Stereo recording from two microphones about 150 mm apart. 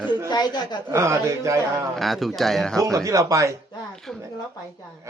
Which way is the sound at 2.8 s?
20° right (ahead or behind).